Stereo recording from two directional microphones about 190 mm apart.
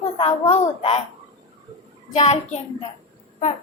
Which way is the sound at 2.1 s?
35° left (ahead or behind).